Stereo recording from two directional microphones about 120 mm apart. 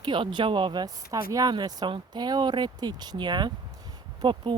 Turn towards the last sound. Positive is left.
turn(degrees=-40)  # may be behind; listen again after turning